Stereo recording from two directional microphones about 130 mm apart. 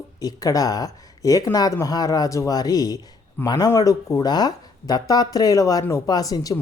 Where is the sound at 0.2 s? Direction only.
25° left (ahead or behind).